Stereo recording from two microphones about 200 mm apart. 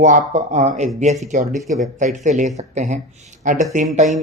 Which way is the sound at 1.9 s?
40° right (ahead or behind).